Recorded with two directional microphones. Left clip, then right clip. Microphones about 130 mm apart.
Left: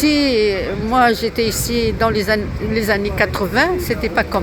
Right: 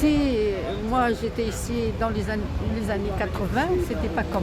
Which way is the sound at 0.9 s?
40° left (ahead or behind).